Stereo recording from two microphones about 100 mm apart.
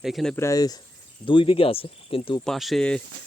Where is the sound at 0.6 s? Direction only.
40° left (ahead or behind).